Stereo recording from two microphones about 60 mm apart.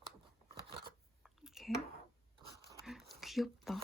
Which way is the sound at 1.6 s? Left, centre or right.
Centre.